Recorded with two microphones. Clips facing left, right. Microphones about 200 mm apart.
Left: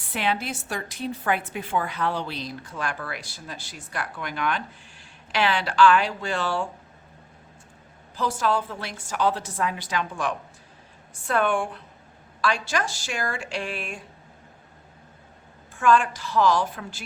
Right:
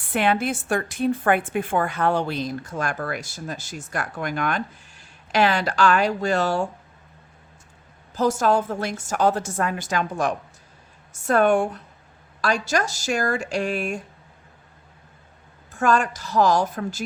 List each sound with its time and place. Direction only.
0.0 s a woman's voice: 50° right (ahead or behind)
8.1 s a woman's voice: 45° right (ahead or behind)
15.7 s a woman's voice: 40° right (ahead or behind)